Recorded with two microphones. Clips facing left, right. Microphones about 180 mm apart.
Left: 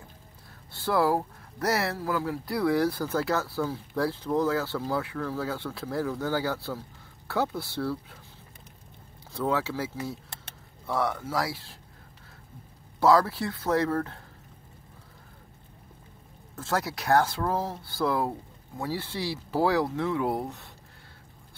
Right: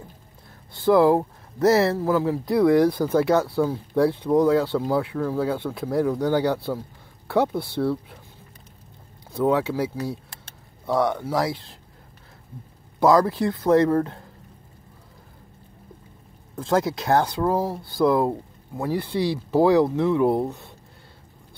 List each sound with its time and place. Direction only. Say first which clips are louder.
0.8 s speech: right 8 dB; 20° right (ahead or behind)
9.3 s speech: right 7 dB; 15° right (ahead or behind)
10.9 s speech: right 6 dB; 20° right (ahead or behind)
13.0 s speech: right 4 dB; 20° right (ahead or behind)
16.5 s speech: right 8 dB; 20° right (ahead or behind)